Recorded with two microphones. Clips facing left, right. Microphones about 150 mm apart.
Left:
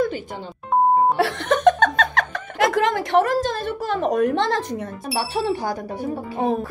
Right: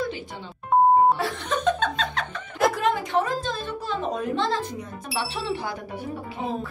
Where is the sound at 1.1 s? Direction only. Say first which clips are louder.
Left 7 dB; 80° left.